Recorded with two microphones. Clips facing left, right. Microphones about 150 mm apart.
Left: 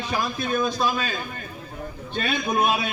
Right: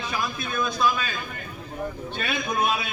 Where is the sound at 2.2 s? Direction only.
30° left (ahead or behind).